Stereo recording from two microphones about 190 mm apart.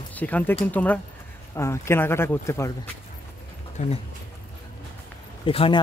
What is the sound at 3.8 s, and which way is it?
Speech, 40° left (ahead or behind).